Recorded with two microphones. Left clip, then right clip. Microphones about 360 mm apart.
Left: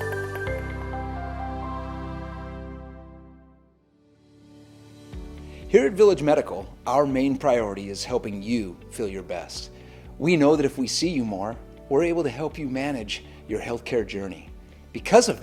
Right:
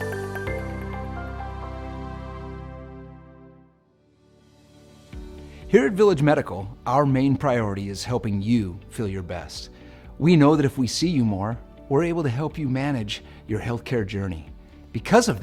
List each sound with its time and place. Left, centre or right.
5.6 s speech: right